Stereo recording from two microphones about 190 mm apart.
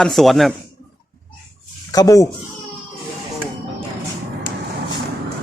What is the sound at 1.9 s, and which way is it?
Speech, 20° left (ahead or behind).